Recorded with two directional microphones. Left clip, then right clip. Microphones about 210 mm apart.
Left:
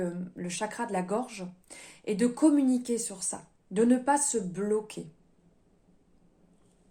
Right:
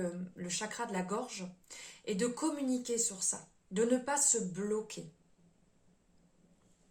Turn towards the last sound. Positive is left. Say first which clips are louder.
# left 7 dB
turn(degrees=40)  # may be behind; listen again after turning